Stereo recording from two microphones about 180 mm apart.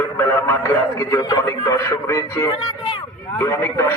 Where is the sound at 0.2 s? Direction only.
15° left (ahead or behind).